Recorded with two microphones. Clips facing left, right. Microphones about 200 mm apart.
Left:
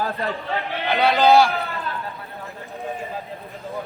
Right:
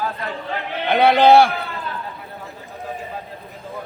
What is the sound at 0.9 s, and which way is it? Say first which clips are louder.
Speech: right 4 dB; 55° right (ahead or behind).